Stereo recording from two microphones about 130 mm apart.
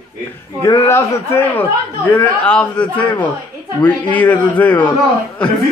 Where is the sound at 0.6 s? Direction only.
20° left (ahead or behind).